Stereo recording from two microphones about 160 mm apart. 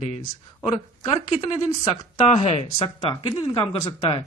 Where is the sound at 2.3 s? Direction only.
40° left (ahead or behind).